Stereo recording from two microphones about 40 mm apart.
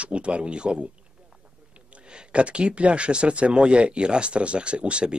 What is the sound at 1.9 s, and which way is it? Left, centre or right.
Speech, right.